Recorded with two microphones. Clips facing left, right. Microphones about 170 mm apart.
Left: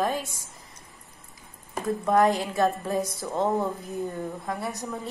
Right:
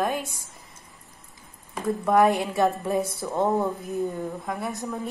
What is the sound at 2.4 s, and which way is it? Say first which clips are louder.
A woman's voice: right 1 dB; 20° right (ahead or behind).